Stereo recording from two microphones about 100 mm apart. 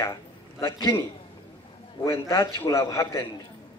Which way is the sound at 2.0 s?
30° left (ahead or behind).